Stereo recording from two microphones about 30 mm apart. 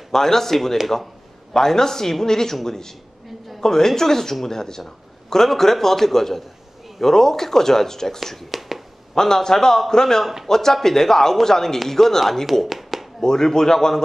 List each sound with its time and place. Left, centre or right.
0.1 s speech: centre
8.5 s finger snapping: centre
9.1 s a man's voice: centre
12.6 s a sound: centre
13.2 s a man's voice: centre